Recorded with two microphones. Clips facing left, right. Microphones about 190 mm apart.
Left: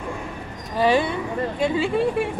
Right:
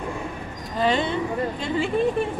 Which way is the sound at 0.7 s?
10° left (ahead or behind).